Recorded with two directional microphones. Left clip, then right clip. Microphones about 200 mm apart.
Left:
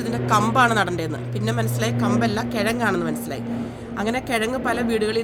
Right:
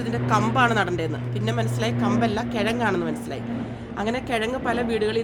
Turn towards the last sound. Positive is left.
turn(degrees=45)  # may be behind; listen again after turning